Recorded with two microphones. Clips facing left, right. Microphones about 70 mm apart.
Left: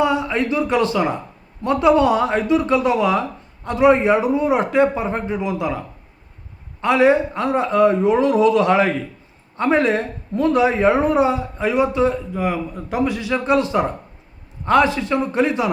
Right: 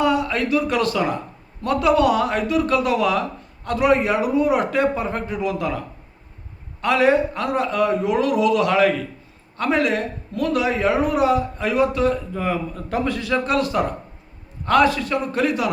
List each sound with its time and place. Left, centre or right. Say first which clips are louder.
0.0 s speech: left 1 dB; left
6.8 s a man's voice: left 2 dB; left